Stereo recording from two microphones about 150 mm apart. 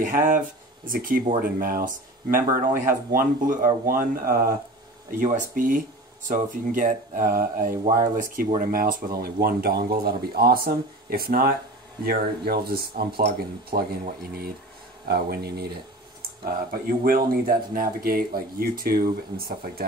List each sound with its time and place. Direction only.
0.0 s speech: 65° right (ahead or behind)
5.2 s speech: 60° right (ahead or behind)
9.2 s speech: 90° right
16.8 s speech: 75° right (ahead or behind)